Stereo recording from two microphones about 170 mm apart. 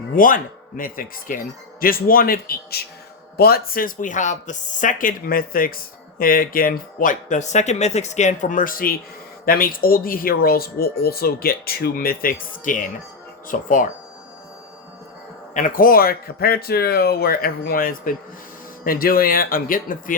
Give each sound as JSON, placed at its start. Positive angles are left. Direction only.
{"t": 0.2, "sound": "speech", "side_deg": 55}
{"t": 15.5, "sound": "speech", "side_deg": 55}